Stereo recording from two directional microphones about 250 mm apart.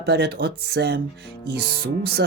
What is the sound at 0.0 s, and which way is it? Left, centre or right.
Speech, right.